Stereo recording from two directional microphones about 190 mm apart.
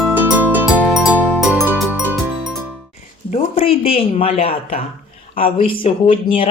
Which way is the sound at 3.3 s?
30° left (ahead or behind).